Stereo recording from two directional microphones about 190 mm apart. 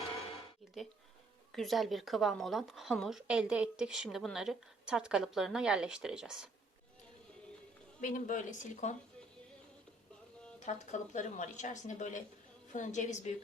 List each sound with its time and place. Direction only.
1.5 s speech: centre (ahead or behind)
8.0 s a woman's voice: 45° left (ahead or behind)
10.6 s a woman's voice: 40° left (ahead or behind)